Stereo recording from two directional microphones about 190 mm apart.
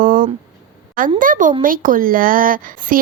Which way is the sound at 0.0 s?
45° right (ahead or behind).